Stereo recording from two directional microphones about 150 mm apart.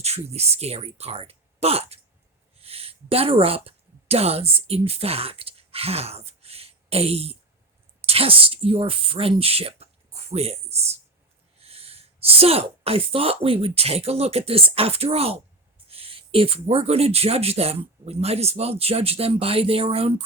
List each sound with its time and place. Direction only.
0.0 s speech: 45° right (ahead or behind)